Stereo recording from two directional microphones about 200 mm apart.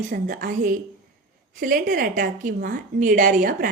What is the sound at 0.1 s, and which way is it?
A woman's voice, 40° right (ahead or behind).